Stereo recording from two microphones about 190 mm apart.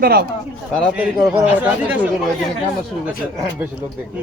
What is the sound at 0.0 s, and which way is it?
Speech, 55° right (ahead or behind).